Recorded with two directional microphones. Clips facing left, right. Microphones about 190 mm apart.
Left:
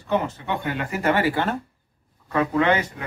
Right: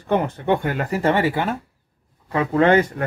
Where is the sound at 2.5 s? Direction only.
45° right (ahead or behind).